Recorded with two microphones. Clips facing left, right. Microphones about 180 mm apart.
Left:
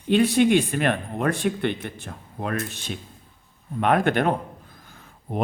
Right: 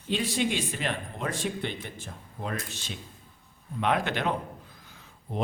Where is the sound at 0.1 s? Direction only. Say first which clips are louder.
Left 11 dB; 60° left (ahead or behind).